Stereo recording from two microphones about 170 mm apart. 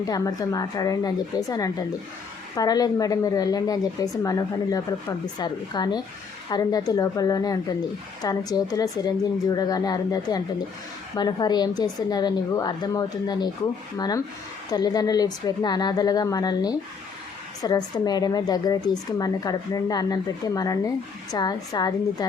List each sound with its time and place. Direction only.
0.0 s a woman's voice: 20° left (ahead or behind)
14.7 s a woman's voice: 25° left (ahead or behind)